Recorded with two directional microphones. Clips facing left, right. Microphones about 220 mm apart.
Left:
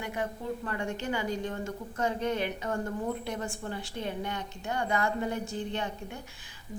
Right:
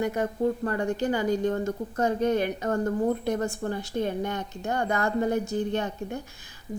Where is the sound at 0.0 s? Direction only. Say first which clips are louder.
Right 9 dB; 40° right (ahead or behind).